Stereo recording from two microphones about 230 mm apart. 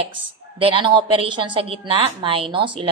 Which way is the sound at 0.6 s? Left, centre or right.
Right.